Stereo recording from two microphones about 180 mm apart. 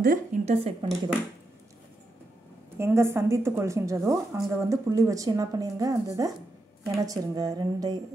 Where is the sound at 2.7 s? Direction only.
15° right (ahead or behind).